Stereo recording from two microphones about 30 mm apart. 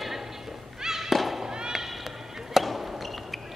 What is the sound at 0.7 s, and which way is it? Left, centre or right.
Thump, centre.